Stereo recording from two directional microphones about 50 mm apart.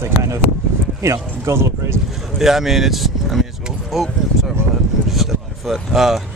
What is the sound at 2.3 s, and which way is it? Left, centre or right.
Speech, centre.